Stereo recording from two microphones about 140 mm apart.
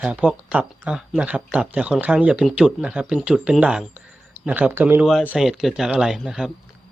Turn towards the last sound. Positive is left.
turn(degrees=-5)  # may be behind; listen again after turning